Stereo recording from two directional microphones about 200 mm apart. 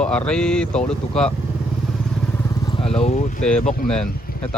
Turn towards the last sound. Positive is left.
turn(degrees=5)  # may be behind; listen again after turning